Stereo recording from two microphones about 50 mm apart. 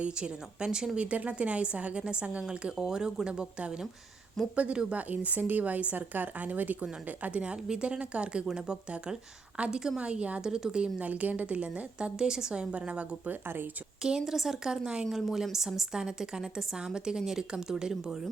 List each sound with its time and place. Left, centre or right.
0.0 s a woman's voice: centre
0.9 s a woman's voice: right
4.5 s a woman's voice: right
10.4 s a woman's voice: centre
11.0 s a woman's voice: right; by 12.6 s centre
12.7 s a woman's voice: right
14.0 s a woman's voice: centre